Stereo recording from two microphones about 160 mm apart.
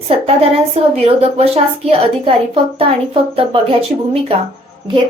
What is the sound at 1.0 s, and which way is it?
Speech, 40° right (ahead or behind).